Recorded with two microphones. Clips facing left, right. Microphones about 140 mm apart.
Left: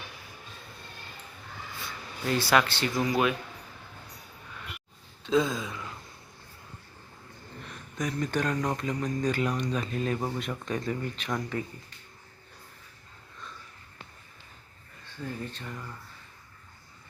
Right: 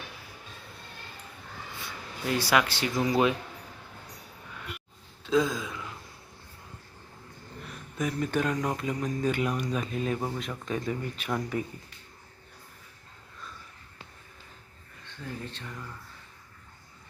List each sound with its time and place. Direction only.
2.2 s speech: 10° right (ahead or behind)
3.1 s speech: 25° right (ahead or behind)
5.2 s gasp: centre (ahead or behind)
7.6 s speech: 5° right (ahead or behind)
15.2 s speech: centre (ahead or behind)